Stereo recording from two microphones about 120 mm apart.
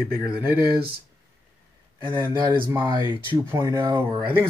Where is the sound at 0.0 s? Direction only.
35° left (ahead or behind).